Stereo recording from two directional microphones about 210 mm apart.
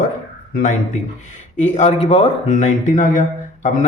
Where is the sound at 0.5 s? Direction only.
35° left (ahead or behind).